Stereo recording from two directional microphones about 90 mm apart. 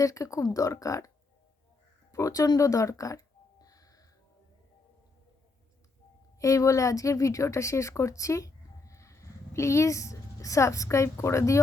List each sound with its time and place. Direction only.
0.0 s speech: 35° left (ahead or behind)
2.1 s speech: 40° left (ahead or behind)
2.6 s a sound: 35° left (ahead or behind)
6.4 s a woman's voice: 35° left (ahead or behind)